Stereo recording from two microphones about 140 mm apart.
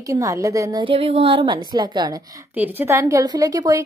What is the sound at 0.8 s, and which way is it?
A woman's voice, 45° right (ahead or behind).